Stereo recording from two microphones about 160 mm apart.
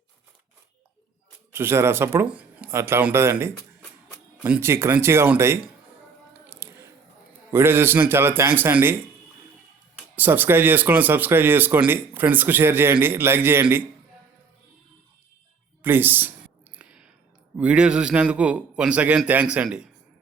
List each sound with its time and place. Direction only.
1.5 s speech: 15° right (ahead or behind)
6.3 s a sound: 15° right (ahead or behind)
7.5 s speech: 15° right (ahead or behind)
10.2 s speech: 10° right (ahead or behind)
15.8 s speech: 15° right (ahead or behind)
16.7 s a sound: 5° right (ahead or behind)
17.6 s speech: 5° right (ahead or behind)